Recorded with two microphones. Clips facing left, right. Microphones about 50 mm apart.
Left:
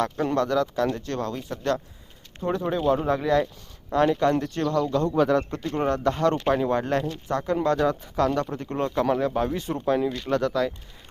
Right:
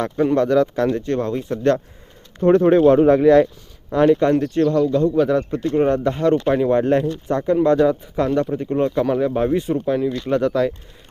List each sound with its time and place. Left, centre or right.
0.0 s speech: centre
0.3 s speech: right
3.9 s speech: centre
5.1 s speech: centre
5.7 s speech: centre
6.7 s speech: right
9.6 s speech: centre
10.1 s speech: centre